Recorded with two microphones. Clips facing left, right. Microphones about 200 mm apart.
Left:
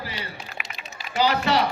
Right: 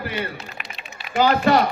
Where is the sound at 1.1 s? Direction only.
50° right (ahead or behind).